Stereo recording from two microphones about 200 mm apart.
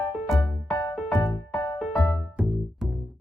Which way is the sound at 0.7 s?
15° left (ahead or behind).